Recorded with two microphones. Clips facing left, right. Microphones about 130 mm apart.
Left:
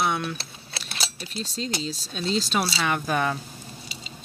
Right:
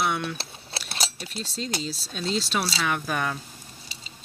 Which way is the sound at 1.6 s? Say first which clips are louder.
Left 1 dB; 5° right (ahead or behind).